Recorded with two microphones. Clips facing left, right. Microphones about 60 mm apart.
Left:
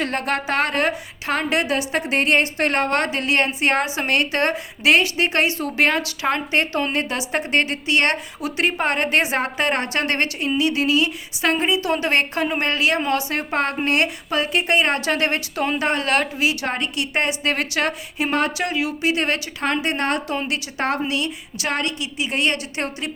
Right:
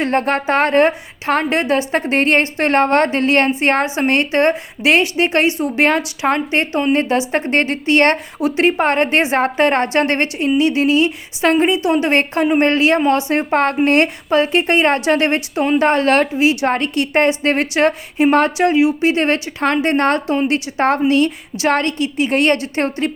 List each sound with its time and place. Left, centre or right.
0.0 s a woman's voice: right